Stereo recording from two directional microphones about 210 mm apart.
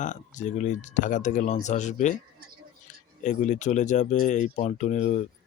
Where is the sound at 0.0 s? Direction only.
35° left (ahead or behind).